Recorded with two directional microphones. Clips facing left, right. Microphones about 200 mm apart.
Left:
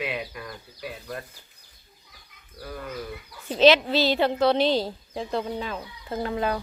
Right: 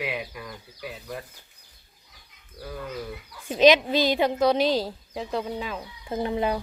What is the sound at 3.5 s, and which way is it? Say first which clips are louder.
A woman's voice: even; 15° right (ahead or behind).